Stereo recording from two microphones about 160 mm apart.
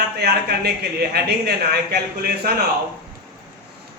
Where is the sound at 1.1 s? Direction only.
80° right.